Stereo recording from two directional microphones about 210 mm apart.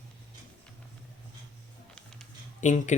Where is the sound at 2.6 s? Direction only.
35° left (ahead or behind).